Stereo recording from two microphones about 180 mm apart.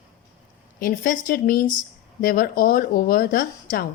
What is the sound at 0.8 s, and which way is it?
A woman's voice, 50° left (ahead or behind).